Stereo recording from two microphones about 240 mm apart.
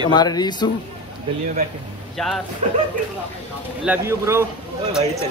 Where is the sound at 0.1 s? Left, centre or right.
Centre.